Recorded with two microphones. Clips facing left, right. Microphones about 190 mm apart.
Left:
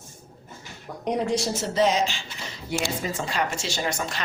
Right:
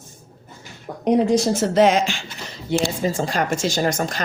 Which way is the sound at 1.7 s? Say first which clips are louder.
Right 6 dB; 90° right.